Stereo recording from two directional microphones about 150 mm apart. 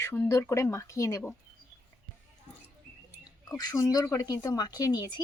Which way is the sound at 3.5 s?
25° left (ahead or behind).